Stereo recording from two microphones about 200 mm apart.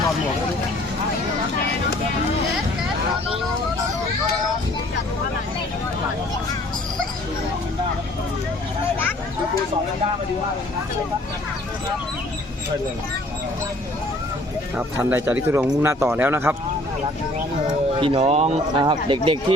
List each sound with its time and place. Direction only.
14.8 s a man's voice: 10° right (ahead or behind)
18.0 s speech: 30° right (ahead or behind)